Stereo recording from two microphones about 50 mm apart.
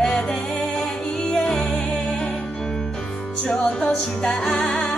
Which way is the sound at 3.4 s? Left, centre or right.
Centre.